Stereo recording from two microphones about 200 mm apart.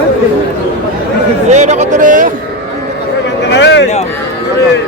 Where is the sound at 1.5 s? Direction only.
35° right (ahead or behind).